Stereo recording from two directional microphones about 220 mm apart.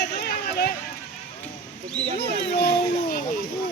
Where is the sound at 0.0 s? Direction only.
45° left (ahead or behind).